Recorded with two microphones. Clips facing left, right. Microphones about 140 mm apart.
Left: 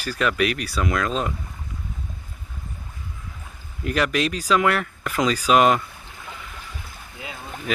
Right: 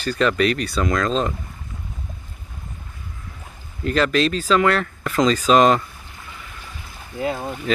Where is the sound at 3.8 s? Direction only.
15° left (ahead or behind).